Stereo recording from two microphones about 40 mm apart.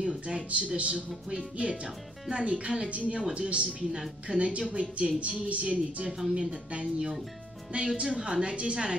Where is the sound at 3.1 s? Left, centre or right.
Right.